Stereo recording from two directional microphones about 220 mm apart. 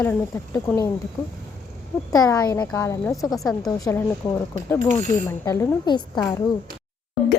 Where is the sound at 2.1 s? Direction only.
15° left (ahead or behind).